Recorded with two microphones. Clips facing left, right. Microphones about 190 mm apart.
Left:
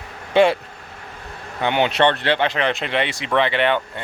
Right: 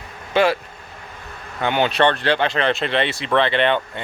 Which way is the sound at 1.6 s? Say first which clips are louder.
Even; 20° left (ahead or behind).